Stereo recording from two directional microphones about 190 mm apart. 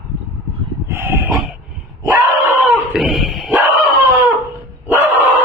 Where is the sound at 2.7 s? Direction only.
Centre (ahead or behind).